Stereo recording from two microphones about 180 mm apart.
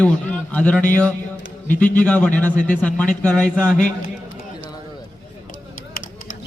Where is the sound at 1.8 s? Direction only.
10° left (ahead or behind).